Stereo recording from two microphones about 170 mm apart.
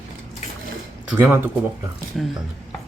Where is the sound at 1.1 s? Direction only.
10° right (ahead or behind).